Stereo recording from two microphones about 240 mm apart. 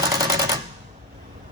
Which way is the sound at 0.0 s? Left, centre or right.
Centre.